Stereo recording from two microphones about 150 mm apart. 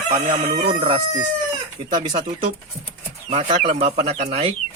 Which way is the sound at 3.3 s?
50° right (ahead or behind).